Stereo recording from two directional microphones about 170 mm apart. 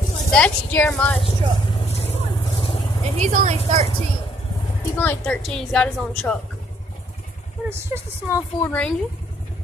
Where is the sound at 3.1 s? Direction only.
40° right (ahead or behind).